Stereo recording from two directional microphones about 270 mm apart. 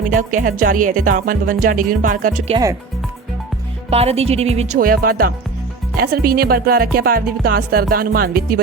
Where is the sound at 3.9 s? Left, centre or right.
Right.